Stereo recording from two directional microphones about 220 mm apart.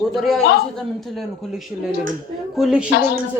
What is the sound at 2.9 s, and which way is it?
Speech, 45° left (ahead or behind).